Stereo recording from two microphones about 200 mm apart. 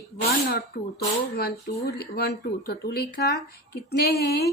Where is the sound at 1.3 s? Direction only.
50° left (ahead or behind).